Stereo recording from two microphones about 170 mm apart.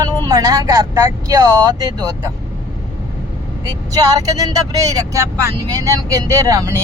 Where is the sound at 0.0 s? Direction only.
20° right (ahead or behind).